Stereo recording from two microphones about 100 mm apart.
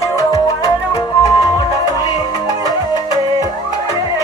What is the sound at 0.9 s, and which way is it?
Music, 35° left (ahead or behind).